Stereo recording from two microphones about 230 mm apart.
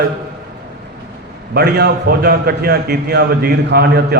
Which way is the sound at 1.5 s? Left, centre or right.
Right.